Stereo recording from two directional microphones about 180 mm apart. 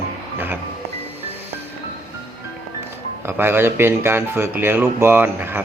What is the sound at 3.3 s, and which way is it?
Speech, 10° right (ahead or behind).